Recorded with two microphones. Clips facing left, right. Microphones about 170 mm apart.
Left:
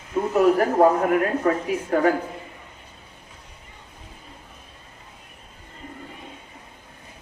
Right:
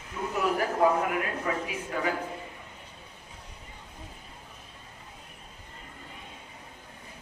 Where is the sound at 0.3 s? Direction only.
50° left (ahead or behind).